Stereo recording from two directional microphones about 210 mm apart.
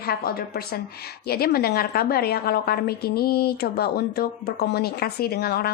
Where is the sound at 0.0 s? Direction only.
45° left (ahead or behind).